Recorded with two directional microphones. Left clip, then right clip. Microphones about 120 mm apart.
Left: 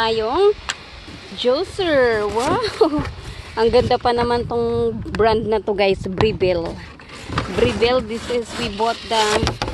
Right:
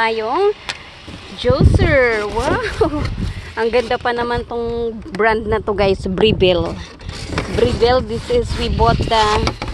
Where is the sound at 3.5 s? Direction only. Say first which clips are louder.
Left 1 dB; 30° left (ahead or behind).